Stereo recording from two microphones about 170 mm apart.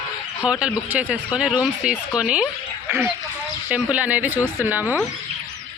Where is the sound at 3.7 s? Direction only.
10° right (ahead or behind).